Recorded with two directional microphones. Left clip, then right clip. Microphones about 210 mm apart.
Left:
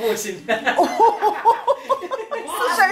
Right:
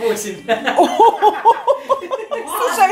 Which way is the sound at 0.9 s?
15° right (ahead or behind).